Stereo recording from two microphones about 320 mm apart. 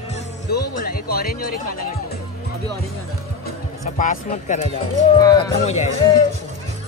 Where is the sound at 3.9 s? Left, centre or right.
Left.